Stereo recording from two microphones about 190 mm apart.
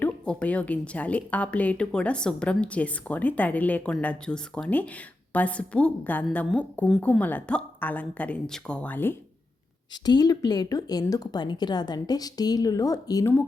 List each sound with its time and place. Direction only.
0.0 s a woman's voice: 5° left (ahead or behind)
9.9 s speech: 20° left (ahead or behind)